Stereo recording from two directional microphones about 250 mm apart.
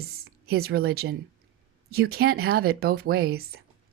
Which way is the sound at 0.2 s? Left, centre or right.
Right.